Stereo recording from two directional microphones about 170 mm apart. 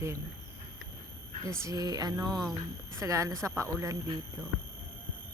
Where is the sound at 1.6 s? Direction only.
20° right (ahead or behind).